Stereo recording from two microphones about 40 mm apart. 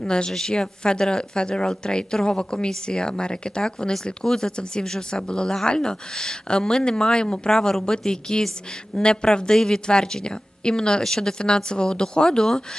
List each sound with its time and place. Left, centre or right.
0.0 s a woman's voice: left
0.3 s speech: centre